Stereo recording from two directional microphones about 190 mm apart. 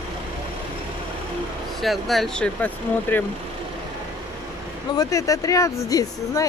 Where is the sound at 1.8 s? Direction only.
Centre (ahead or behind).